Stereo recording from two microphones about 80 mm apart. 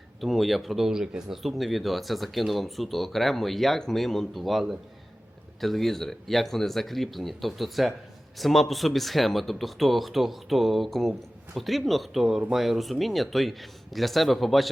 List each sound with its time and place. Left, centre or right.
0.2 s speech: centre